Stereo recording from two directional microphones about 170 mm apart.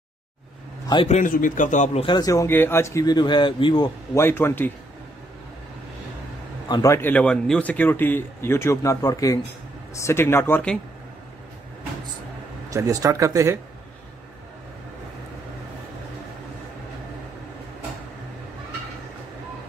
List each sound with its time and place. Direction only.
1.0 s a man's voice: 45° left (ahead or behind)
2.0 s speech: 20° left (ahead or behind)
4.2 s a man's voice: 15° left (ahead or behind)
6.7 s a man's voice: 20° left (ahead or behind)
12.6 s speech: 20° right (ahead or behind)